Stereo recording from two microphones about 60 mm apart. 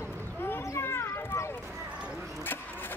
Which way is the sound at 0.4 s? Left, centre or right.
Left.